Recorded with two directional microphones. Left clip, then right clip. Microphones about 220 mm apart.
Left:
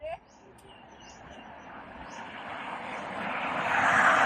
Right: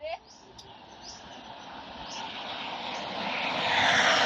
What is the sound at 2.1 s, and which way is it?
Vehicle, 15° left (ahead or behind).